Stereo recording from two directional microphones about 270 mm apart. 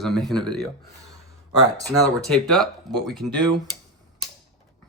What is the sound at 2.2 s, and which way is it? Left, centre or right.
Speech, centre.